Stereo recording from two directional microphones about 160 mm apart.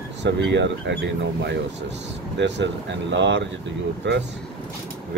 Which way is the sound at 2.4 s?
90° right.